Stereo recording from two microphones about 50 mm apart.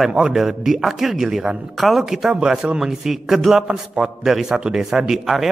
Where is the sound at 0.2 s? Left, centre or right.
Centre.